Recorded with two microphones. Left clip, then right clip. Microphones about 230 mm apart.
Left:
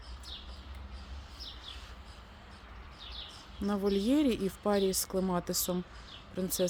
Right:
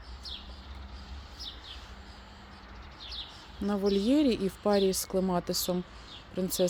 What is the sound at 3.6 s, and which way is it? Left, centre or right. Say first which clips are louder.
Speech: right 3 dB; centre.